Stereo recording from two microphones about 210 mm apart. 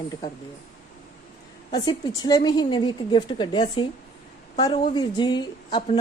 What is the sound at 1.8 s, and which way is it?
A woman's voice, 20° left (ahead or behind).